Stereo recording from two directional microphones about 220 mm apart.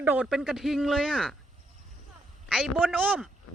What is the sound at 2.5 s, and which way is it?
Speech, 5° right (ahead or behind).